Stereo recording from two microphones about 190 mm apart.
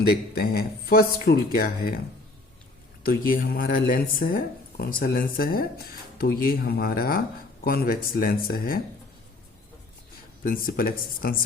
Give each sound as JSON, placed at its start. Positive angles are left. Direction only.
{"t": 0.1, "sound": "speech", "side_deg": 55}
{"t": 3.0, "sound": "speech", "side_deg": 50}
{"t": 10.4, "sound": "speech", "side_deg": 50}